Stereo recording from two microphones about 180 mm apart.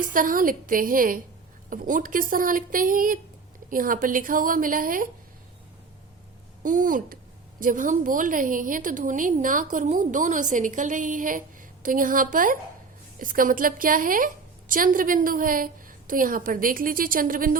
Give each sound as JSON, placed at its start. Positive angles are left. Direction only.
{"t": 0.0, "sound": "a woman's voice", "side_deg": -50}
{"t": 6.6, "sound": "a woman's voice", "side_deg": -45}